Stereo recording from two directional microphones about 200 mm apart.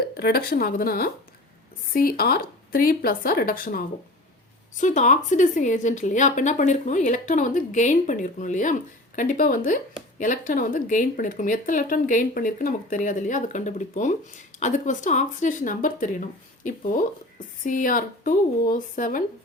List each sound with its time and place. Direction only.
0.0 s a woman's voice: 50° left (ahead or behind)